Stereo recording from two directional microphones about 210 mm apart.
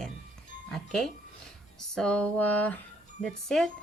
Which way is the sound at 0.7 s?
Centre (ahead or behind).